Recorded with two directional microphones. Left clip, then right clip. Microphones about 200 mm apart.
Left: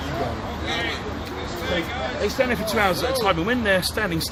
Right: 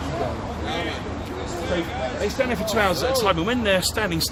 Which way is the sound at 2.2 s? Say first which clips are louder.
Left 2 dB; 20° left (ahead or behind).